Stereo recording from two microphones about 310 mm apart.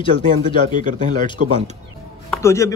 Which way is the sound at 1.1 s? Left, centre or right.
Centre.